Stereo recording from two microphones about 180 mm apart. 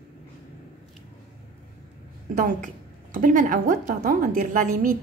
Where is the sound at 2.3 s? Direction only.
45° right (ahead or behind).